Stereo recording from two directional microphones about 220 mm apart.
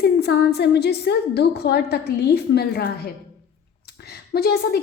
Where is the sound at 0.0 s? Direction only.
50° left (ahead or behind).